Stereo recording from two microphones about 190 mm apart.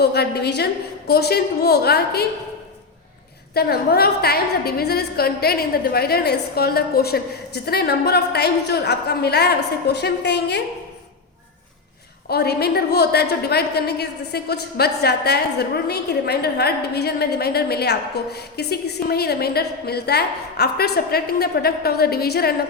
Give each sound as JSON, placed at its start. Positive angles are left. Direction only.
{"t": 0.0, "sound": "a woman's voice", "side_deg": 55}
{"t": 3.5, "sound": "a woman's voice", "side_deg": 55}
{"t": 12.3, "sound": "a woman's voice", "side_deg": 55}